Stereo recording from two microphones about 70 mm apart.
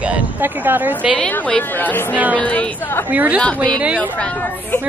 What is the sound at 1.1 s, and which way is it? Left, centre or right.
Speech, left.